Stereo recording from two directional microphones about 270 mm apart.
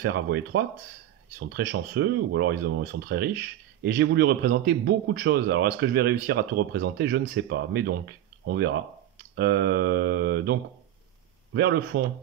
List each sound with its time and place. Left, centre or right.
0.0 s a man's voice: right